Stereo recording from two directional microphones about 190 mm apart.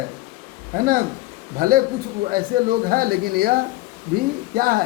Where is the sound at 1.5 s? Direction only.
50° right (ahead or behind).